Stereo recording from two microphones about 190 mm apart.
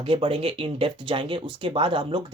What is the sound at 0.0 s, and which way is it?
Speech, 30° right (ahead or behind).